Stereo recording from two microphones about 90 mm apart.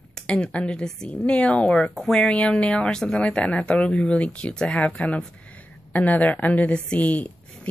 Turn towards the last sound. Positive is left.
turn(degrees=15)  # may be behind; listen again after turning